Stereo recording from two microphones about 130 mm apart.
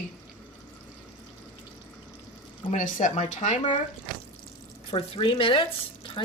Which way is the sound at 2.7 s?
70° left (ahead or behind).